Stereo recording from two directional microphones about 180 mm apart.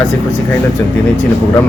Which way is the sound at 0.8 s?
15° left (ahead or behind).